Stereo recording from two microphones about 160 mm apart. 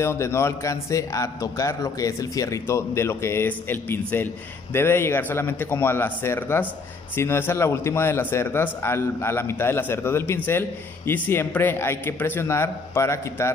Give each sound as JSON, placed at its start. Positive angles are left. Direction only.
{"t": 0.0, "sound": "speech", "side_deg": 15}